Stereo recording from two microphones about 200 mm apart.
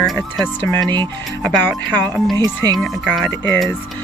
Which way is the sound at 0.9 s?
20° right (ahead or behind).